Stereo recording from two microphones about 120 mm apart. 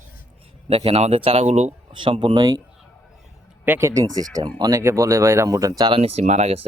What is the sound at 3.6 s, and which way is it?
Speech, 20° right (ahead or behind).